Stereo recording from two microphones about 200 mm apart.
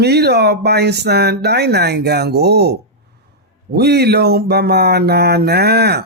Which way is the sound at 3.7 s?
55° right (ahead or behind).